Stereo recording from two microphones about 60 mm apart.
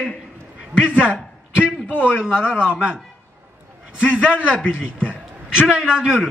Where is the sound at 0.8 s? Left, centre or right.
Centre.